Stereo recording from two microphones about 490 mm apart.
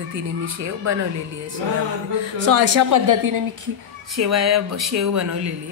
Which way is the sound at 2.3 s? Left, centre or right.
Right.